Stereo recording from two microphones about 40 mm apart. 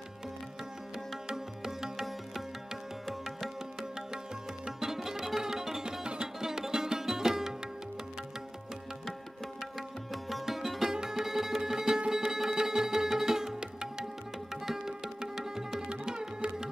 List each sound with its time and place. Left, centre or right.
1.1 s music: centre
4.6 s music: centre
9.8 s music: centre
14.5 s tabla: centre
16.1 s music: centre